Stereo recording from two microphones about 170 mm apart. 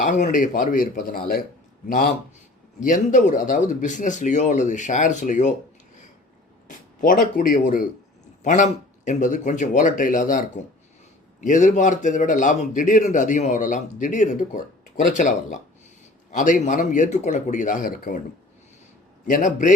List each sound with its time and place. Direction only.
0.0 s a man's voice: 50° left (ahead or behind)
6.7 s a man's voice: 55° left (ahead or behind)
19.3 s a man's voice: 45° left (ahead or behind)